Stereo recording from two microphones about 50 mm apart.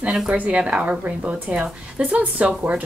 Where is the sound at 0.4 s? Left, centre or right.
Right.